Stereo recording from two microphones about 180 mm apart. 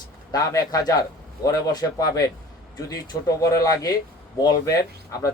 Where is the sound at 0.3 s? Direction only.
20° left (ahead or behind).